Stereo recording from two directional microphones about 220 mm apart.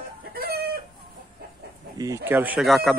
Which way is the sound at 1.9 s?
15° right (ahead or behind).